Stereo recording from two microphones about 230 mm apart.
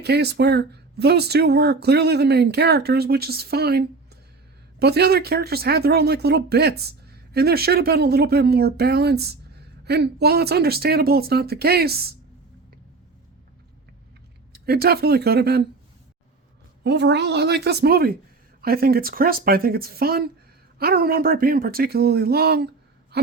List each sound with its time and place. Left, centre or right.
0.0 s speech: right
14.7 s speech: right
16.8 s speech: right